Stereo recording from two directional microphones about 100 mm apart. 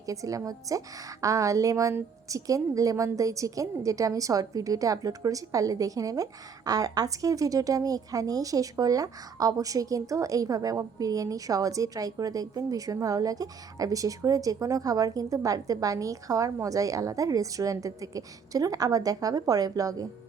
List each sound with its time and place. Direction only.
0.0 s a woman's voice: 35° right (ahead or behind)